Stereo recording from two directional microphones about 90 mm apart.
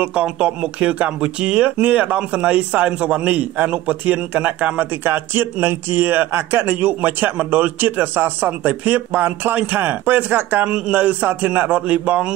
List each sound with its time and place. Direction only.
0.0 s speech: 10° right (ahead or behind)